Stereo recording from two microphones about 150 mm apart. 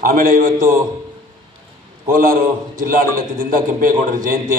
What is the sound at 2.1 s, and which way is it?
A man's voice, 70° right (ahead or behind).